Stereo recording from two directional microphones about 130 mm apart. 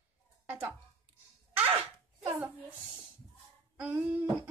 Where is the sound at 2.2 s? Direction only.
15° right (ahead or behind).